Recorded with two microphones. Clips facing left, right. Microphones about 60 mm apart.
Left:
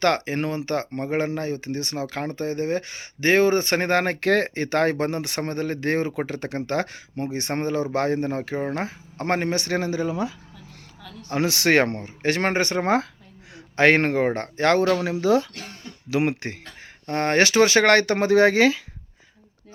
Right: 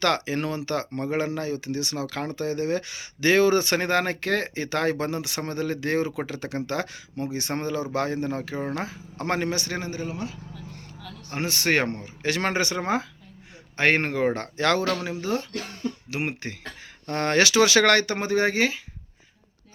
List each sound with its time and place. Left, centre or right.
0.0 s speech: left
11.3 s speech: left
13.7 s speech: left
14.3 s speech: left
15.0 s speech: left
17.1 s speech: left
18.0 s speech: left